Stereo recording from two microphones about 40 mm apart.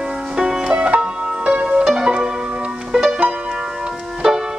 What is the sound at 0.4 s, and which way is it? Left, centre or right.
Music, centre.